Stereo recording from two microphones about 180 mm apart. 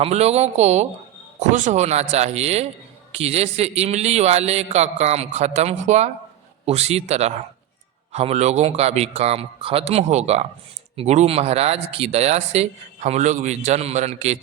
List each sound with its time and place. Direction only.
0.0 s a man's voice: 35° right (ahead or behind)